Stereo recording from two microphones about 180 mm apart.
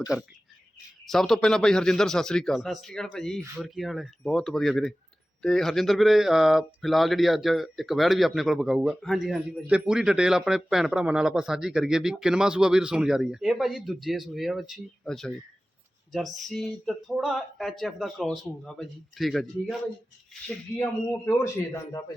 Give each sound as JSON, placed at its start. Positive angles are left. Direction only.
{"t": 1.1, "sound": "speech", "side_deg": 0}
{"t": 20.7, "sound": "a man's voice", "side_deg": 15}